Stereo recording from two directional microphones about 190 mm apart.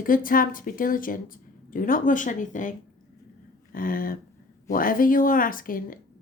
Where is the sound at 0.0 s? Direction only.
45° left (ahead or behind).